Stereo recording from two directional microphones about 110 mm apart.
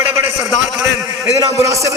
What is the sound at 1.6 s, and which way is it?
Speech, 25° right (ahead or behind).